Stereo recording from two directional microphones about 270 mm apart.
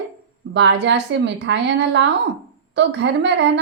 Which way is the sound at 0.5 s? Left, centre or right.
Right.